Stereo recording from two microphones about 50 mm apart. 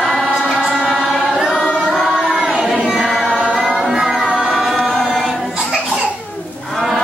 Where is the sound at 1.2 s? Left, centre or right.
Centre.